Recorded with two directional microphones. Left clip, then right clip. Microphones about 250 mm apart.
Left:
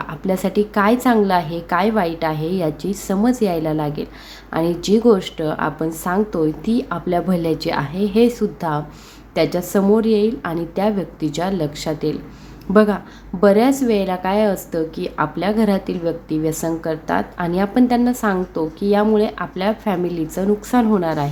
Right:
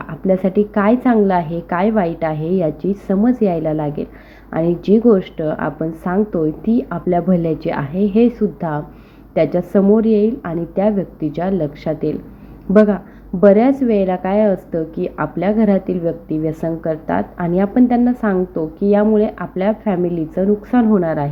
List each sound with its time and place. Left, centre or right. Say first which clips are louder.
0.0 s a woman's voice: right 4 dB; centre